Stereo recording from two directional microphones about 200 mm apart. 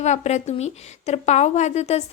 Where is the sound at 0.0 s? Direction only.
35° left (ahead or behind).